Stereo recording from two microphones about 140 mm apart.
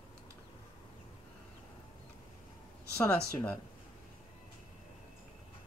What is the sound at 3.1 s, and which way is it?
Speech, 10° left (ahead or behind).